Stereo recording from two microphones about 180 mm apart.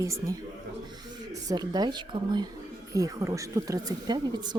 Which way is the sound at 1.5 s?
20° right (ahead or behind).